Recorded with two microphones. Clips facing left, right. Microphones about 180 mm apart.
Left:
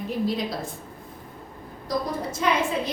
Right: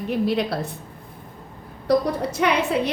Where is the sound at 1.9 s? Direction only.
70° right (ahead or behind).